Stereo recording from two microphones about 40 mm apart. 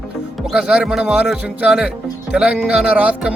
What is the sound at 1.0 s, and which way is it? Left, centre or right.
Speech, right.